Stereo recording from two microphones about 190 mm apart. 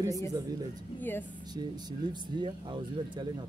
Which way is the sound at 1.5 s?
25° right (ahead or behind).